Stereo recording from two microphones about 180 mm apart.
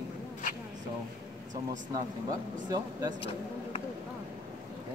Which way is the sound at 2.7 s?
25° right (ahead or behind).